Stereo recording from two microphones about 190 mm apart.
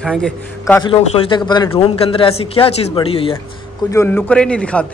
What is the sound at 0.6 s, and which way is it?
Speech, 15° left (ahead or behind).